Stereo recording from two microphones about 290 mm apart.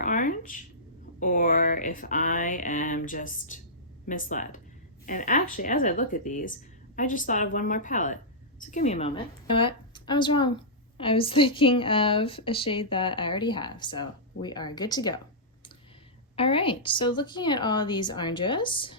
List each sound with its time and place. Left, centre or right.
0.0 s a sound: left
1.2 s a woman's voice: left
16.3 s a woman's voice: centre